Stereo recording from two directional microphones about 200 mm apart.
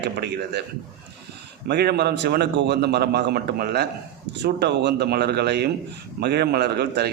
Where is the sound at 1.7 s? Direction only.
55° right (ahead or behind).